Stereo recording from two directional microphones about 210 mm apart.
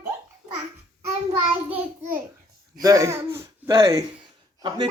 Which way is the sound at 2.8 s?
15° right (ahead or behind).